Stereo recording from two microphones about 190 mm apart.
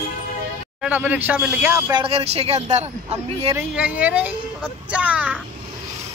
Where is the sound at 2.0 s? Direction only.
35° right (ahead or behind).